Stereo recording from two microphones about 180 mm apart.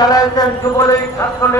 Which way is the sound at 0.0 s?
20° left (ahead or behind).